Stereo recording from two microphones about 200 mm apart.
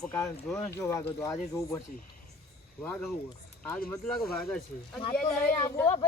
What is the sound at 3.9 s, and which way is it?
Speech, 5° left (ahead or behind).